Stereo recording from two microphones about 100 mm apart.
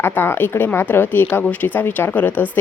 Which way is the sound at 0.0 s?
25° left (ahead or behind).